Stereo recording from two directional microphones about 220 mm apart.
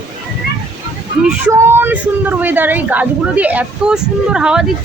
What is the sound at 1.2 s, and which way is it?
Speech, 10° right (ahead or behind).